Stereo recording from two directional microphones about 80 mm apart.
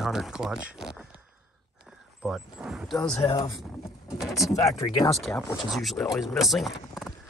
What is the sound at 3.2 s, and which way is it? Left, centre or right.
Speech, left.